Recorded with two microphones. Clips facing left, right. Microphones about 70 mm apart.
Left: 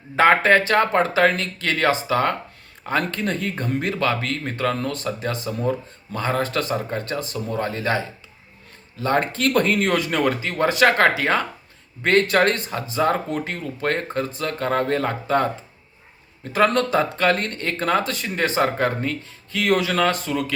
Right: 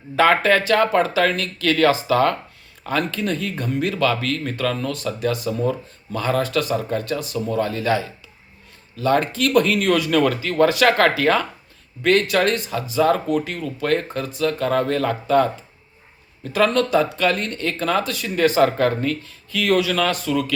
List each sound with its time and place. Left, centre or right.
0.2 s speech: left
3.1 s speech: left
12.0 s a man's voice: left